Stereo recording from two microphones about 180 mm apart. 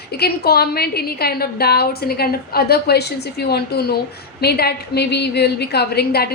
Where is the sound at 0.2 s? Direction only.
60° left (ahead or behind).